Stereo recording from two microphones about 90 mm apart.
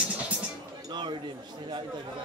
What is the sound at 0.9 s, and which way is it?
Speech, 55° right (ahead or behind).